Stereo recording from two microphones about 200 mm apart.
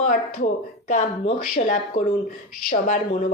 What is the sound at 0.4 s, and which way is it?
Speech, 35° left (ahead or behind).